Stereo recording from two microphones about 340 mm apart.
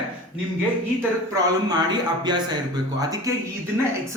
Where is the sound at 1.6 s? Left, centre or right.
Centre.